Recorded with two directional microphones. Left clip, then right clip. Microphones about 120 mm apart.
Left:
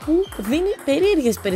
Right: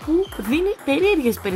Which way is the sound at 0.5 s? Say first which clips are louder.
Left 1 dB; 35° left (ahead or behind).